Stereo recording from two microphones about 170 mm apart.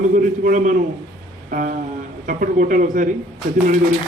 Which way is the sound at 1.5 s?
55° right (ahead or behind).